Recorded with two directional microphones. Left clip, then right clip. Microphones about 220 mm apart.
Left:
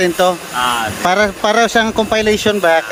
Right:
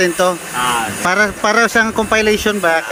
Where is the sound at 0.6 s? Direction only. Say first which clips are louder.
Even; 20° left (ahead or behind).